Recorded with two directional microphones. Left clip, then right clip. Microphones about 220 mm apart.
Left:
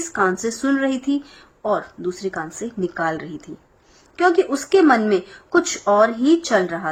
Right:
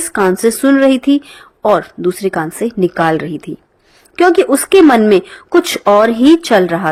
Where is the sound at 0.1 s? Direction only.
35° right (ahead or behind).